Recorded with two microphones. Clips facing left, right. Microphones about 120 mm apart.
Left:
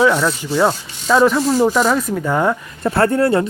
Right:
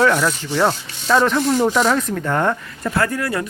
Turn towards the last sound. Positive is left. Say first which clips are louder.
# left 6 dB
turn(degrees=30)  # may be behind; listen again after turning